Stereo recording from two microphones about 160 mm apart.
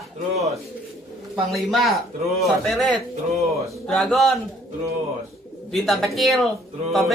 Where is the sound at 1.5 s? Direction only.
Centre (ahead or behind).